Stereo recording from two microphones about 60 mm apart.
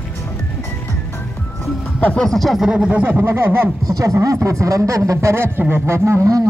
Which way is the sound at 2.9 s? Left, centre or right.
Right.